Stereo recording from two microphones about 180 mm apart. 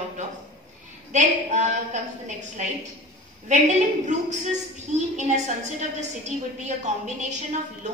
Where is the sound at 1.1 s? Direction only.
40° right (ahead or behind).